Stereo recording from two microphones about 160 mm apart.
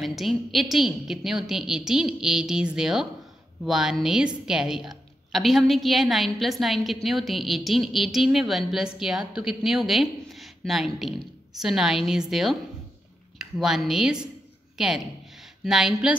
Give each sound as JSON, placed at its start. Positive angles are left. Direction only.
{"t": 0.0, "sound": "a woman's voice", "side_deg": 0}